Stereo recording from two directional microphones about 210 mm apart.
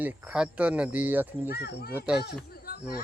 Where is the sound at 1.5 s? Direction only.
50° left (ahead or behind).